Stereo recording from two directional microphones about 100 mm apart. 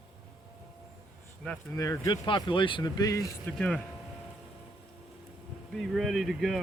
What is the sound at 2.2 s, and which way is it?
Speech, 55° left (ahead or behind).